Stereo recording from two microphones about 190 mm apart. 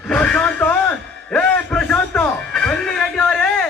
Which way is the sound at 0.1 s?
5° left (ahead or behind).